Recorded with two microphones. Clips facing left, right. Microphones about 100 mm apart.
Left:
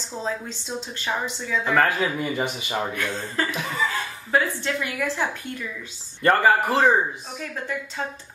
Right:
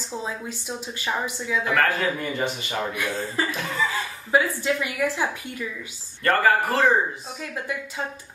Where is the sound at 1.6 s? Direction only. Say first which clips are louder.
Left 2 dB; 10° left (ahead or behind).